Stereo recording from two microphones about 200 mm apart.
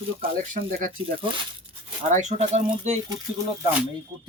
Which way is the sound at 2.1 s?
35° right (ahead or behind).